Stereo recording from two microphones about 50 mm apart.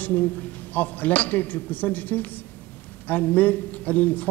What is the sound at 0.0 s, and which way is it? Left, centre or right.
A man's voice, left.